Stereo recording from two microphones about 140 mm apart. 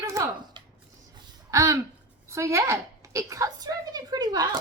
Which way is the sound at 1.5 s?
25° right (ahead or behind).